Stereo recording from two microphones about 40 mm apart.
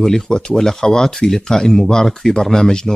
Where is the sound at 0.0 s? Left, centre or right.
Centre.